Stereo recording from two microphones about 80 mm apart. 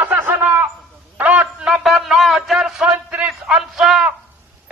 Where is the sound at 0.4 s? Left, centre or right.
Right.